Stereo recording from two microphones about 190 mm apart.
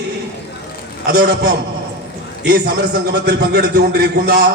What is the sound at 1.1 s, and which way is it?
Speech, 60° right (ahead or behind).